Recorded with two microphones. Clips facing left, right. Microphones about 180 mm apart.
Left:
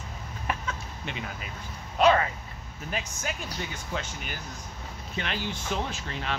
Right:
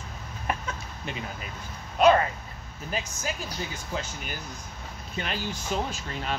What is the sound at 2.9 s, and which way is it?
Speech, 35° right (ahead or behind).